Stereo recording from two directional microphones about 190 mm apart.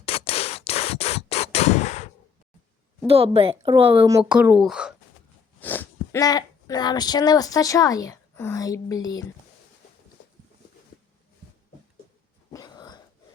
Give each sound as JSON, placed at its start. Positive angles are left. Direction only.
{"t": 0.0, "sound": "a sound", "side_deg": 30}
{"t": 3.1, "sound": "a woman's voice", "side_deg": -30}
{"t": 3.8, "sound": "speech", "side_deg": -15}
{"t": 4.2, "sound": "speech", "side_deg": -5}
{"t": 5.5, "sound": "speech", "side_deg": 10}
{"t": 12.5, "sound": "a sound", "side_deg": 20}